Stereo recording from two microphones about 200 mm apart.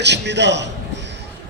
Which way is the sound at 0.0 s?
60° right (ahead or behind).